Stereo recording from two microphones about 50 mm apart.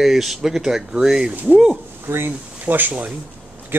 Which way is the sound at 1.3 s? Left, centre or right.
Right.